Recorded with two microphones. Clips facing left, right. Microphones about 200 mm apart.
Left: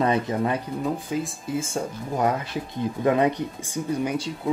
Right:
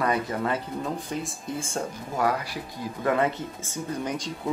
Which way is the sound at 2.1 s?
20° left (ahead or behind).